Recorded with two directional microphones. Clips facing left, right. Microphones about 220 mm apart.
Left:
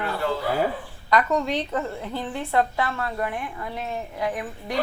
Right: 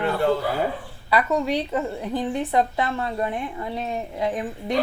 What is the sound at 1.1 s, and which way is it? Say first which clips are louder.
A woman's voice: right 1 dB; 10° right (ahead or behind).